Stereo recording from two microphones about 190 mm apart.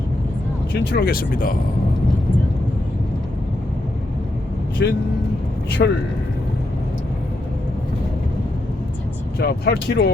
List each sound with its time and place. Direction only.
0.7 s speech: 60° left (ahead or behind)
4.8 s speech: 65° left (ahead or behind)
9.4 s speech: 60° left (ahead or behind)